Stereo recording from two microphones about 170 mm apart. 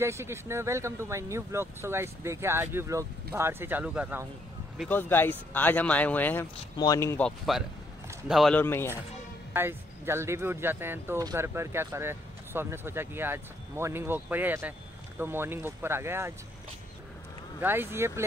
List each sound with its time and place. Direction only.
0.0 s speech: 15° right (ahead or behind)
4.8 s speech: 10° left (ahead or behind)
7.2 s speech: centre (ahead or behind)
8.5 s speech: 15° left (ahead or behind)
9.5 s speech: 15° right (ahead or behind)
17.6 s speech: 10° right (ahead or behind)